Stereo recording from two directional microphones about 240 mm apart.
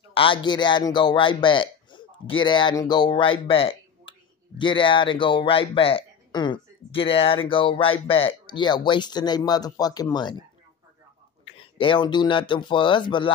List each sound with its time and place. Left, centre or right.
0.1 s a man's voice: left
11.4 s speech: left